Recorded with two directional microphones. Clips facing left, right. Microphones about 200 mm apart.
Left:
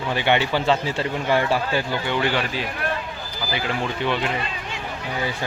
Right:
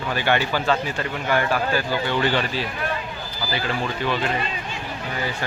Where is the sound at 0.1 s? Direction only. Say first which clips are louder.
Left 1 dB; 20° left (ahead or behind).